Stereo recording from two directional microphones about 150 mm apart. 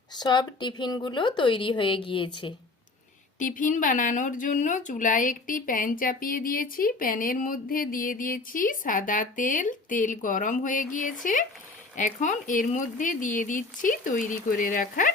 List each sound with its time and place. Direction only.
0.1 s a woman's voice: 30° left (ahead or behind)
3.3 s speech: 60° left (ahead or behind)